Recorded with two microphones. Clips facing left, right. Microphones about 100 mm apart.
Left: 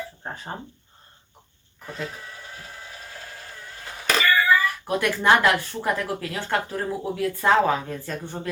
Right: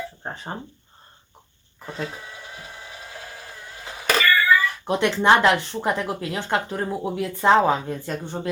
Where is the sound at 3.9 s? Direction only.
5° right (ahead or behind).